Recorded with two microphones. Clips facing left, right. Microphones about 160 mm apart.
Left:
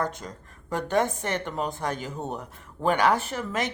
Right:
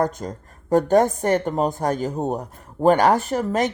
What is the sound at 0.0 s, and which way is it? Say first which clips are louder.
A woman's voice: right 7 dB; 40° right (ahead or behind).